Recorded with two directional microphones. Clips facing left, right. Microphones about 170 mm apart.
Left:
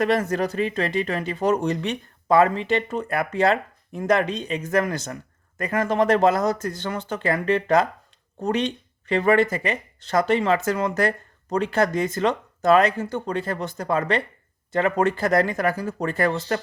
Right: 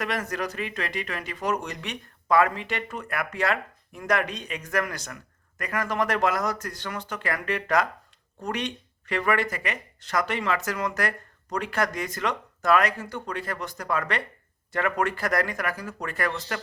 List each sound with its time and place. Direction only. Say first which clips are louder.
0.0 s speech: left 8 dB; 30° left (ahead or behind)